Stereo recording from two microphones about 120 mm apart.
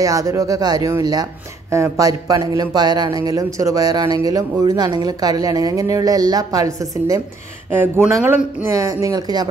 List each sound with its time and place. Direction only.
0.0 s speech: 30° right (ahead or behind)
7.7 s speech: 15° right (ahead or behind)
8.7 s speech: 25° right (ahead or behind)